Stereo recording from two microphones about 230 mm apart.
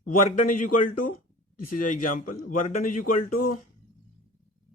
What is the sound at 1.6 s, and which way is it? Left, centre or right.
Speech, left.